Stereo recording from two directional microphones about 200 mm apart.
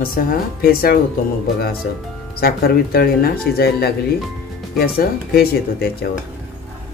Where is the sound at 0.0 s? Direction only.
45° left (ahead or behind).